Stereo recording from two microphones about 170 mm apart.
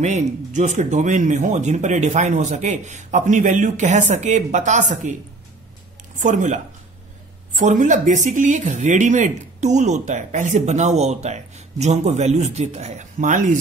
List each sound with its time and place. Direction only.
0.0 s speech: 45° right (ahead or behind)
6.1 s speech: 45° right (ahead or behind)